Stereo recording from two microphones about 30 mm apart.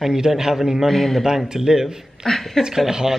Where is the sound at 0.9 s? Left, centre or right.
Centre.